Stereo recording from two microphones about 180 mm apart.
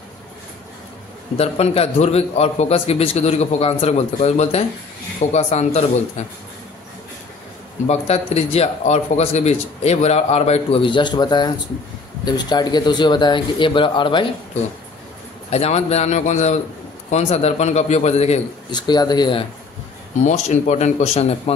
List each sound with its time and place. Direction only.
1.3 s a man's voice: 35° left (ahead or behind)
7.8 s a man's voice: 35° left (ahead or behind)
15.5 s a man's voice: 35° left (ahead or behind)
18.7 s speech: 25° left (ahead or behind)
20.2 s a man's voice: 40° left (ahead or behind)